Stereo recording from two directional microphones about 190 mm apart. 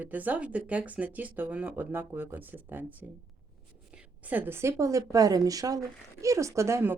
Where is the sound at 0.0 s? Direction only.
10° right (ahead or behind).